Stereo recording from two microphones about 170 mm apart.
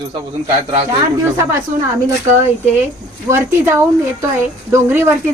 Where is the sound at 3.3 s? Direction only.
15° right (ahead or behind).